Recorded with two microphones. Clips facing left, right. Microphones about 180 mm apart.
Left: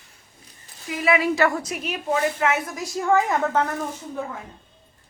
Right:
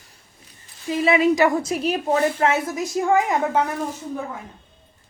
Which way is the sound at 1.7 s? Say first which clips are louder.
Right 4 dB; 35° right (ahead or behind).